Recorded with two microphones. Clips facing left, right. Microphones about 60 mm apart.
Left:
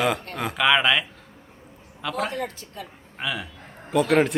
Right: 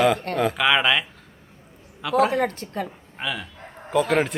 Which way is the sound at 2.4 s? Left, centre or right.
Right.